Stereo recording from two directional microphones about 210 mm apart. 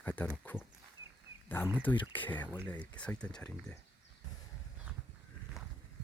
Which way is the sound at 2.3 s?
10° left (ahead or behind).